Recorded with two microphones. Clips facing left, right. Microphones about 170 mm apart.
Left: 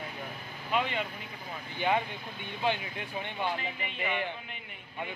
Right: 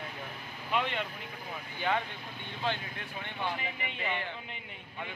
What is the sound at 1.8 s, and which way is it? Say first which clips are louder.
Speech: left 3 dB; 15° left (ahead or behind).